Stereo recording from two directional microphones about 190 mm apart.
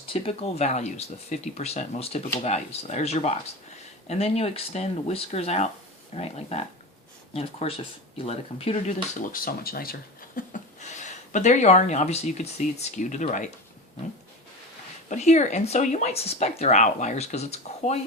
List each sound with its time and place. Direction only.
0.1 s speech: 30° left (ahead or behind)
15.1 s speech: 40° left (ahead or behind)